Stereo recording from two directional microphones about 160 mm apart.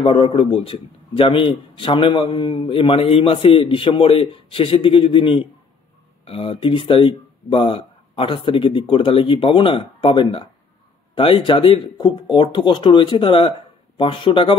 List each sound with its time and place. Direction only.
0.0 s a man's voice: 35° left (ahead or behind)